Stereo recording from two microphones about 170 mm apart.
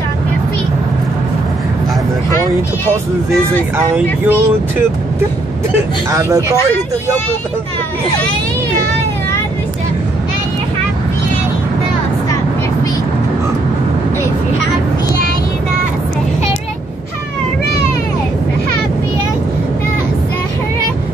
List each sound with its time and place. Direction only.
3.7 s speech: 10° right (ahead or behind)